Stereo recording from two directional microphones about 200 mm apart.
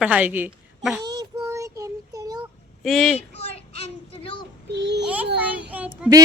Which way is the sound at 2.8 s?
Centre (ahead or behind).